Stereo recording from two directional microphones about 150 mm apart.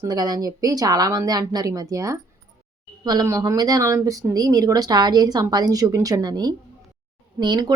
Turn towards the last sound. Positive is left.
turn(degrees=-30)  # may be behind; listen again after turning